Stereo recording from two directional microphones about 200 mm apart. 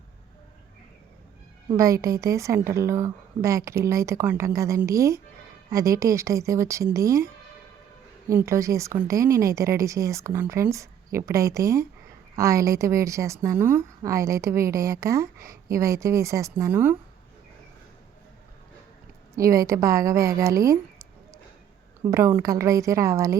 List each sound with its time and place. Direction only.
1.7 s a woman's voice: 15° right (ahead or behind)
8.3 s a woman's voice: 15° right (ahead or behind)
19.4 s a woman's voice: 15° right (ahead or behind)